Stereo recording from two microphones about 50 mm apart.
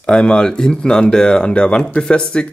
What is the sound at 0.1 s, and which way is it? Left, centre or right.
Speech, centre.